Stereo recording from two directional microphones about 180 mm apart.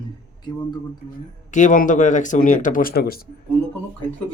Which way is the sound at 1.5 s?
45° left (ahead or behind).